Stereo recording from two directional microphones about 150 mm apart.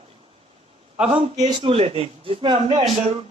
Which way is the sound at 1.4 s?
35° right (ahead or behind).